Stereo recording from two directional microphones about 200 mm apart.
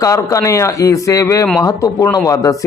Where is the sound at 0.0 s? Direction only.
15° left (ahead or behind).